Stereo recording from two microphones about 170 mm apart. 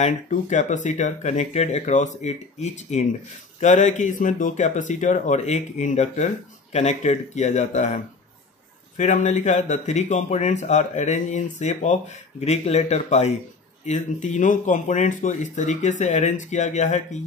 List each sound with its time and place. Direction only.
0.0 s speech: 45° left (ahead or behind)